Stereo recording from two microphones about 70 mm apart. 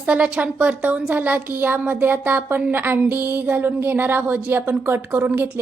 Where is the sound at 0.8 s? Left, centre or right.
Right.